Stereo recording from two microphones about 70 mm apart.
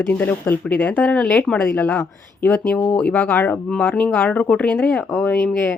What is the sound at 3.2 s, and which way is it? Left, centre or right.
Speech, left.